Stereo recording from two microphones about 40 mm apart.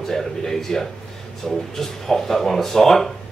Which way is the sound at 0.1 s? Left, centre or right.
Centre.